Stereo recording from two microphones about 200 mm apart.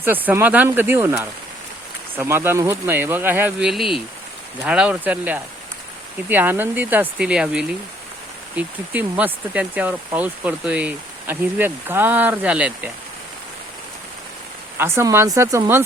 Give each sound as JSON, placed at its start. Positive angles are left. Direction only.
{"t": 0.0, "sound": "speech", "side_deg": -10}
{"t": 14.8, "sound": "speech", "side_deg": -10}